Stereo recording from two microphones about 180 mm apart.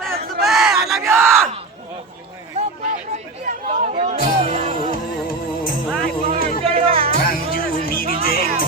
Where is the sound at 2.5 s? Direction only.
40° right (ahead or behind).